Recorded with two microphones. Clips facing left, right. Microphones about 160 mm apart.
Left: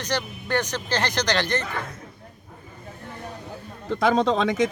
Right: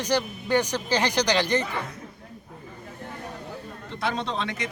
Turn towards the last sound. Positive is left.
turn(degrees=90)